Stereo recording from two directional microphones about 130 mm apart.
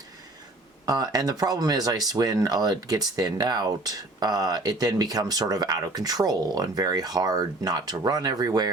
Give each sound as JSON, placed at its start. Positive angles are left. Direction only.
{"t": 0.9, "sound": "speech", "side_deg": -30}